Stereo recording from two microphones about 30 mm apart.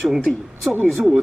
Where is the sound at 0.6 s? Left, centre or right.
Centre.